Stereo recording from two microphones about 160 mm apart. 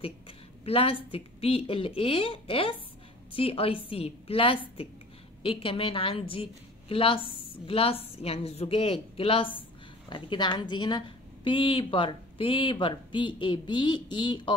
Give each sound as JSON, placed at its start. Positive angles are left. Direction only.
{"t": 0.7, "sound": "speech", "side_deg": 35}